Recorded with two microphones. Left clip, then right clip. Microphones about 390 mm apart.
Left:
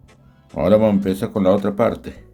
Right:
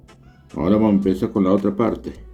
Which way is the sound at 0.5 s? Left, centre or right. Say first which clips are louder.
Left 4 dB; left.